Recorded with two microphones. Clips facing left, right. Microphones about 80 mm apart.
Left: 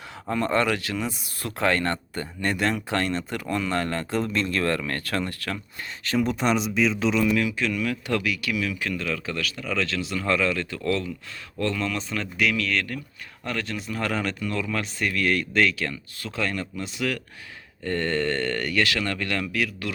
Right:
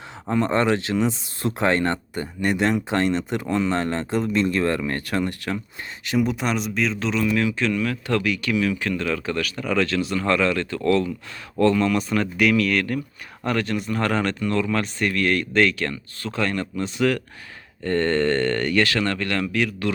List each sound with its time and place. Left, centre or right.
0.3 s speech: right
6.1 s speech: centre